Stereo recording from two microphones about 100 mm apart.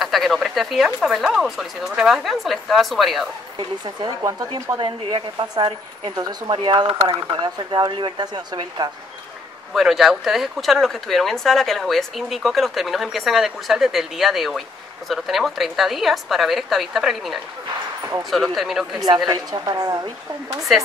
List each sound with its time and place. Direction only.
0.0 s speech: centre (ahead or behind)
3.5 s speech: 50° right (ahead or behind)
4.2 s a woman's voice: 35° right (ahead or behind)
4.7 s a woman's voice: 55° right (ahead or behind)
6.1 s speech: 40° right (ahead or behind); by 7.4 s 60° right (ahead or behind)
7.4 s speech: 50° right (ahead or behind)
9.8 s speech: centre (ahead or behind)
19.0 s a woman's voice: 45° right (ahead or behind)